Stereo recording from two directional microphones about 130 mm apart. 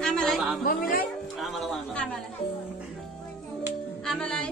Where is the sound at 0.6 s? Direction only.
90° left.